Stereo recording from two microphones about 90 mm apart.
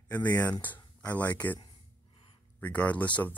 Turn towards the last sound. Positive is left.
turn(degrees=15)  # may be behind; listen again after turning